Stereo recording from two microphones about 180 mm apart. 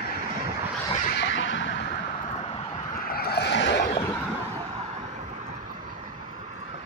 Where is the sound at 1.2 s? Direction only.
90° left.